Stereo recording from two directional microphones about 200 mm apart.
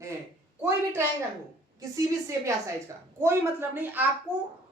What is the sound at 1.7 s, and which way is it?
A woman's voice, 15° right (ahead or behind).